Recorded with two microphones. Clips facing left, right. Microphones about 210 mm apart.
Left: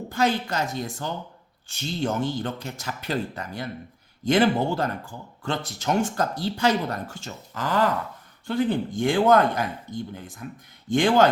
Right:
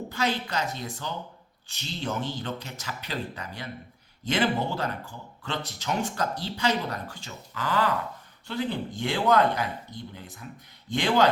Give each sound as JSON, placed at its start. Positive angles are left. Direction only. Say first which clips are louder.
{"t": 0.1, "sound": "speech", "louder": "left 6 dB", "side_deg": 45}